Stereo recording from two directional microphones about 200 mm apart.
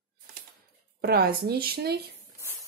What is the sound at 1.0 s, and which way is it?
Speech, 50° right (ahead or behind).